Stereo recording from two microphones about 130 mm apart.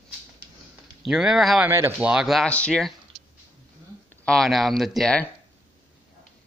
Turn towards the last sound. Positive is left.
turn(degrees=0)  # may be behind; listen again after turning